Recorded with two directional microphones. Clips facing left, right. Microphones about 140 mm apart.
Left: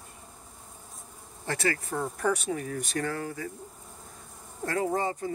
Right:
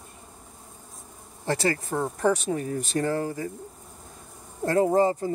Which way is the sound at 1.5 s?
30° right (ahead or behind).